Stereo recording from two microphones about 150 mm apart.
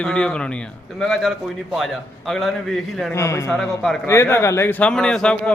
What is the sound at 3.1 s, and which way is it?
A man's voice, 20° left (ahead or behind).